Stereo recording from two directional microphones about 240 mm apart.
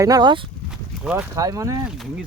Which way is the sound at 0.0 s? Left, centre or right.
Centre.